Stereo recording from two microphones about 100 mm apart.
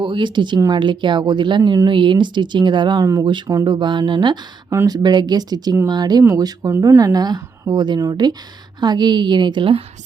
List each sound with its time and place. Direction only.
0.0 s a woman's voice: 55° right (ahead or behind)